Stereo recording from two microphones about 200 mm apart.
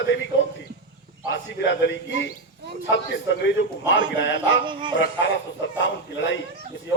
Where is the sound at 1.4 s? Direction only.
65° left (ahead or behind).